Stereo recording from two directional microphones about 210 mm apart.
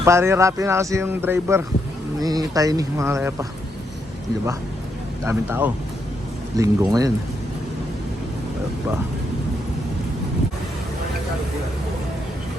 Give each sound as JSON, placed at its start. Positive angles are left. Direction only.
{"t": 0.0, "sound": "speech", "side_deg": -15}
{"t": 5.2, "sound": "speech", "side_deg": -10}